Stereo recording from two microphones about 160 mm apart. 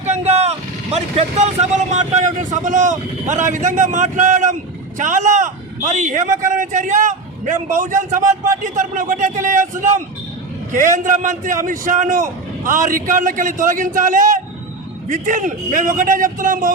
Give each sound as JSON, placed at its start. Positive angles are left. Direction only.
{"t": 0.0, "sound": "speech", "side_deg": -45}
{"t": 10.7, "sound": "a man's voice", "side_deg": -50}